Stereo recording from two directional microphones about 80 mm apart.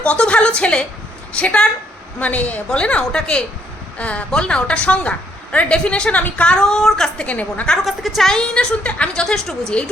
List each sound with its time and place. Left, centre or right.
0.0 s a woman's voice: centre
7.9 s a woman's voice: centre